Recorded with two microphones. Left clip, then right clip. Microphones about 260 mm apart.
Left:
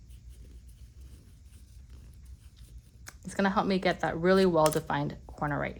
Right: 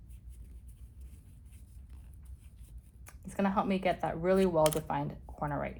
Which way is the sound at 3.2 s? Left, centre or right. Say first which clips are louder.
Left 3 dB; left.